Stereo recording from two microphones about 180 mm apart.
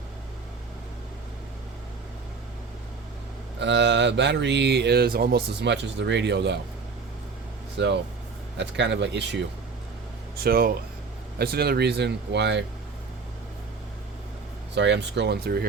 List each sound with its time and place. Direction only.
3.6 s speech: 75° right (ahead or behind)
7.8 s speech: 75° right (ahead or behind)
10.3 s speech: 55° right (ahead or behind); by 12.6 s 70° right (ahead or behind)
14.8 s speech: 75° right (ahead or behind)